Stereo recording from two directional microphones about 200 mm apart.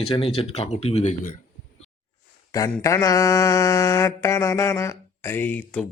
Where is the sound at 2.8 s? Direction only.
15° left (ahead or behind).